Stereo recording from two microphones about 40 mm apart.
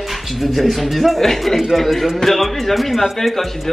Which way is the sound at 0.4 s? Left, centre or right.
Centre.